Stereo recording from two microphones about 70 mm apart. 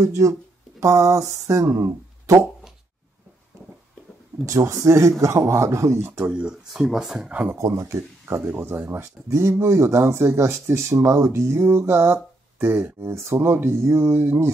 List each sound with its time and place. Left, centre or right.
0.0 s speech: right
4.5 s speech: right
6.2 s speech: centre
7.5 s speech: right
8.5 s speech: right